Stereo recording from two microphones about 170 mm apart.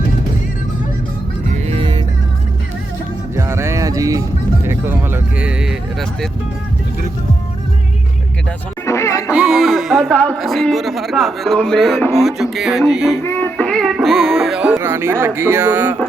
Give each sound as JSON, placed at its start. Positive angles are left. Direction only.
{"t": 1.6, "sound": "music", "side_deg": -35}
{"t": 3.3, "sound": "music", "side_deg": -15}
{"t": 4.6, "sound": "speech", "side_deg": -15}
{"t": 8.9, "sound": "music", "side_deg": 15}
{"t": 9.3, "sound": "a man's voice", "side_deg": -5}
{"t": 13.2, "sound": "music", "side_deg": 10}
{"t": 14.8, "sound": "speech", "side_deg": -15}